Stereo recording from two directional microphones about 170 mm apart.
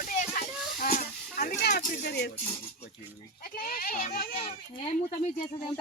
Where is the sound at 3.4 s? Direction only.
60° left (ahead or behind).